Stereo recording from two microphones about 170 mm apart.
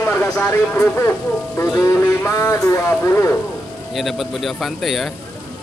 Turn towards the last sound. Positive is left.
turn(degrees=0)  # may be behind; listen again after turning